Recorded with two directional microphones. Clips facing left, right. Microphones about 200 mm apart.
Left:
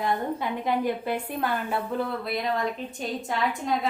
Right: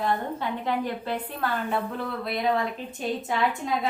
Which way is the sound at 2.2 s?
Centre (ahead or behind).